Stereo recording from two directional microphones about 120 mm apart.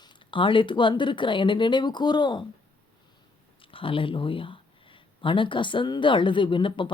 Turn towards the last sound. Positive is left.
turn(degrees=45)  # may be behind; listen again after turning